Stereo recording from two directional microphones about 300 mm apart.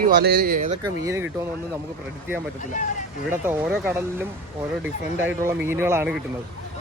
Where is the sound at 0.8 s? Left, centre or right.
Centre.